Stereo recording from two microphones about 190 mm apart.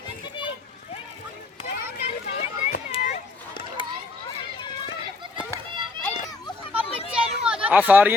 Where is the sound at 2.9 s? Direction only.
40° left (ahead or behind).